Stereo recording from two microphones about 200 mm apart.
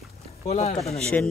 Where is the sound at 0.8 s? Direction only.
5° left (ahead or behind).